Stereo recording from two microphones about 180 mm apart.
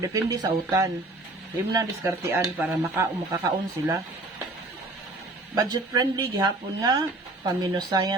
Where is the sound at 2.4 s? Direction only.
10° right (ahead or behind).